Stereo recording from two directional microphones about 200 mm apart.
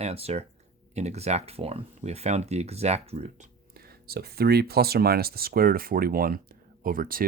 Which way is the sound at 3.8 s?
50° right (ahead or behind).